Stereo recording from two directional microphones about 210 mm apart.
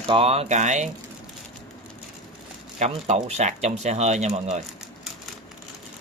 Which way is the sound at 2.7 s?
30° right (ahead or behind).